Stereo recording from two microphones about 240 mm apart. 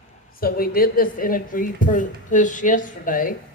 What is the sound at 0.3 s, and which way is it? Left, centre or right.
Speech, left.